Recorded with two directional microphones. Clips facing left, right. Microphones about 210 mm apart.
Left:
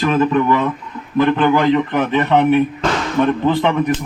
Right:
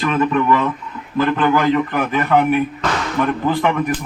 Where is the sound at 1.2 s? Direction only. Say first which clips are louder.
Left 2 dB; 20° left (ahead or behind).